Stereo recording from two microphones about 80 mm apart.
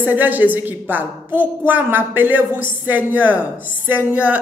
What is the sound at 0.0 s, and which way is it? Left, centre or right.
A woman's voice, right.